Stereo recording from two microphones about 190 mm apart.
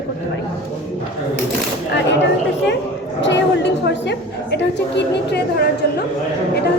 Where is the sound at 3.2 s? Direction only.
70° left (ahead or behind).